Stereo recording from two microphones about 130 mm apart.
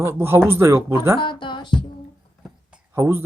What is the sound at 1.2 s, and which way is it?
Speech, 35° left (ahead or behind).